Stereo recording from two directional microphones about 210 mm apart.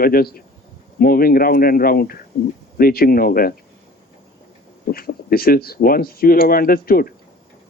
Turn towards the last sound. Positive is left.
turn(degrees=45)  # may be behind; listen again after turning